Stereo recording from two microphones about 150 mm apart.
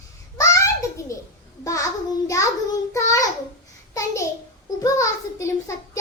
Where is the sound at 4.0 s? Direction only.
20° left (ahead or behind).